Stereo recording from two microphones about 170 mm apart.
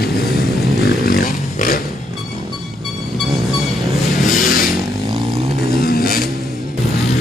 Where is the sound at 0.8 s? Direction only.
60° left (ahead or behind).